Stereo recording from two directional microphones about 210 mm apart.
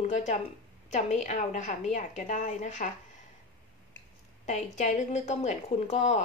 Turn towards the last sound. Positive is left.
turn(degrees=35)  # may be behind; listen again after turning